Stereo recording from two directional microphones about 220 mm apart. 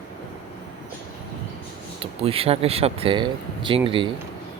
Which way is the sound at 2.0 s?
25° right (ahead or behind).